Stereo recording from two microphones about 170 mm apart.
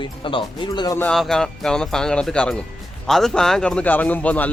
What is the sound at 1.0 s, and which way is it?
A man's voice, 5° left (ahead or behind).